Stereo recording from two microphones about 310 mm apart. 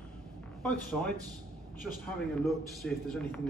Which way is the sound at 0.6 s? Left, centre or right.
Centre.